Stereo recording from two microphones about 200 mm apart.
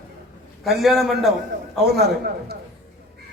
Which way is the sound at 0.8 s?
Centre (ahead or behind).